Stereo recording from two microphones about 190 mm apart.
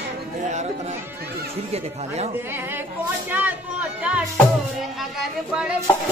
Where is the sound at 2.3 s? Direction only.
10° right (ahead or behind).